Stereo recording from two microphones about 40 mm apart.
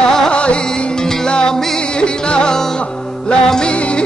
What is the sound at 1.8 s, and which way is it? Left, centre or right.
Music, left.